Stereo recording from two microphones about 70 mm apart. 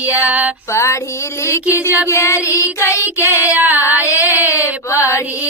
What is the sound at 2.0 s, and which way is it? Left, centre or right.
Child singing, left.